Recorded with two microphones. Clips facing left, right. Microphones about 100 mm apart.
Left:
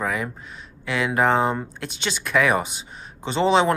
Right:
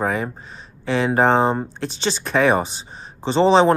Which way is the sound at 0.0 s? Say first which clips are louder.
Right 4 dB; 35° right (ahead or behind).